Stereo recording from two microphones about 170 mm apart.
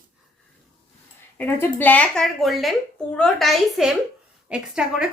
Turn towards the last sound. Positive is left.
turn(degrees=-5)  # may be behind; listen again after turning